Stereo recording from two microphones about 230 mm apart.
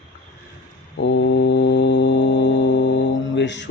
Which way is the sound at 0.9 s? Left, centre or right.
Left.